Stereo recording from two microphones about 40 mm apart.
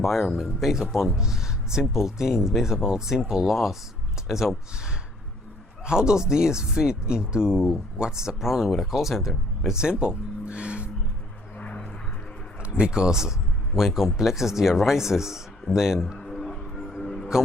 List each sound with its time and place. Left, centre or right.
0.0 s speech: centre
5.8 s speech: centre
9.6 s speech: centre
11.5 s vehicle: left
12.8 s speech: centre
16.1 s a sound: centre
16.7 s music: centre
17.0 s music: centre